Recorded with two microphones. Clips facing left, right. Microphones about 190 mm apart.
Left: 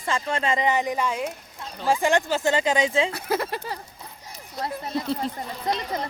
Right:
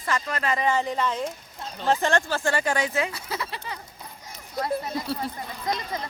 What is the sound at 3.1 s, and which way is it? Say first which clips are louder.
Speech: left 7 dB; 55° left (ahead or behind).